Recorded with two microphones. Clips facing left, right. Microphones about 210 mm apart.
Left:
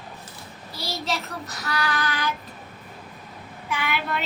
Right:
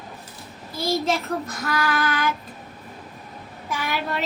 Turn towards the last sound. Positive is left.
turn(degrees=-40)  # may be behind; listen again after turning